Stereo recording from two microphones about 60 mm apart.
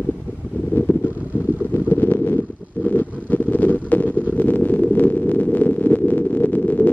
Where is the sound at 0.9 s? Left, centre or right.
Left.